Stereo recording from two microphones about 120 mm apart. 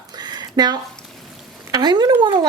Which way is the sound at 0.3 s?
35° right (ahead or behind).